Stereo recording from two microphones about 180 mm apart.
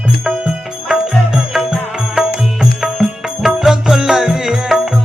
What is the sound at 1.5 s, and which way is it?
Music, centre (ahead or behind).